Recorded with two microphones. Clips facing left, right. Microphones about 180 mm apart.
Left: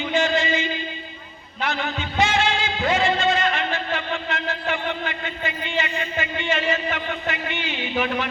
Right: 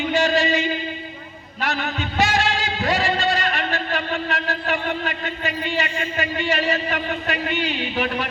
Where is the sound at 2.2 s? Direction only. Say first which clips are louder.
Even; 40° right (ahead or behind).